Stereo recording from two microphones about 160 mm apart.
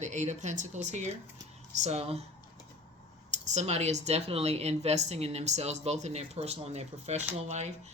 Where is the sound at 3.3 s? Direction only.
45° right (ahead or behind).